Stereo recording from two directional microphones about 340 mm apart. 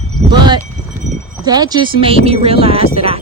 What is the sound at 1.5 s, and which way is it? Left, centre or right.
Speech, centre.